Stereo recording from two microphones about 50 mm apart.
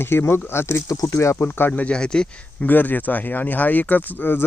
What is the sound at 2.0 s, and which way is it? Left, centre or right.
Speech, centre.